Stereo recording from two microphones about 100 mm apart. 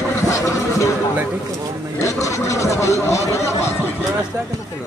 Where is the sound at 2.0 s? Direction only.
30° left (ahead or behind).